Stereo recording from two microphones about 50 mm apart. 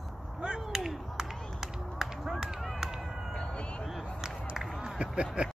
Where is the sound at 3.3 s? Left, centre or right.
Left.